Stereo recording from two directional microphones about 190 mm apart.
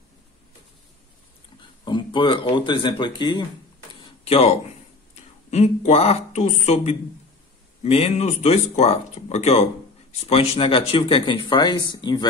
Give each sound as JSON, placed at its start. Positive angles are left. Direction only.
{"t": 1.6, "sound": "speech", "side_deg": 25}